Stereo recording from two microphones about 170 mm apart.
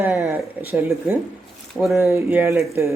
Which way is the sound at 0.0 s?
15° right (ahead or behind).